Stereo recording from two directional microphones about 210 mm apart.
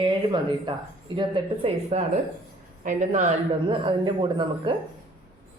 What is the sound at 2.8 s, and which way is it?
Speech, 35° right (ahead or behind).